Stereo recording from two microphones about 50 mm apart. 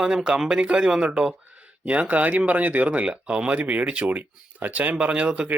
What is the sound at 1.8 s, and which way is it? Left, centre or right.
Speech, right.